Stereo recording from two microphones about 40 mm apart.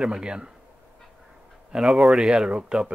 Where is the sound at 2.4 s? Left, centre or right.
Centre.